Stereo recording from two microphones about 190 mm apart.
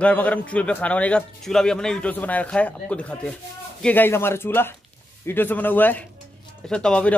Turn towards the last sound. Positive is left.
turn(degrees=5)  # may be behind; listen again after turning